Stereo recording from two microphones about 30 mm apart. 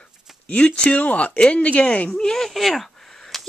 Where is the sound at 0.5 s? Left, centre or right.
Left.